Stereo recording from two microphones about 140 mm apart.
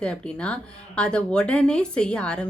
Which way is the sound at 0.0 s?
5° left (ahead or behind).